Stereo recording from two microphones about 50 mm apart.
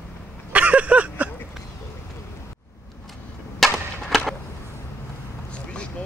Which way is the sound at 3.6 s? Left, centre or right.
Centre.